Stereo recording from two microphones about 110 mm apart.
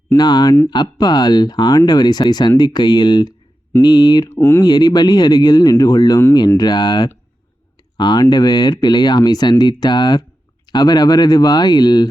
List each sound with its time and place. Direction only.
0.2 s speech: 40° left (ahead or behind)
4.3 s speech: 20° left (ahead or behind)
4.6 s speech: 40° left (ahead or behind)